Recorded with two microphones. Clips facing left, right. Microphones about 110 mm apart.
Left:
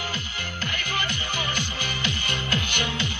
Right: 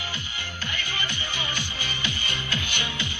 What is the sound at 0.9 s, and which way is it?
Music, 50° left (ahead or behind).